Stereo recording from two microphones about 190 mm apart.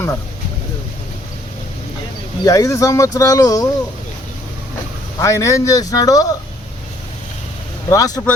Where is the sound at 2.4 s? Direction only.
15° left (ahead or behind).